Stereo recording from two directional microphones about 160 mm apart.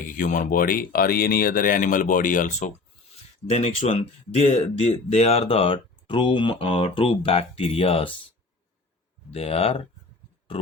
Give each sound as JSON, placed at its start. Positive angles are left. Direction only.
{"t": 0.2, "sound": "speech", "side_deg": 55}
{"t": 9.3, "sound": "speech", "side_deg": 40}